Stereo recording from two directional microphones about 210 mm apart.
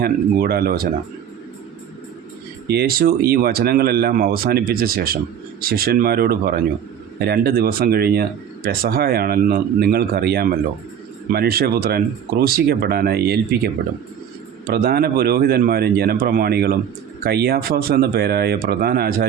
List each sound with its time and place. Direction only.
0.0 s speech: 45° right (ahead or behind)
2.6 s speech: 45° right (ahead or behind)
14.7 s speech: 45° right (ahead or behind)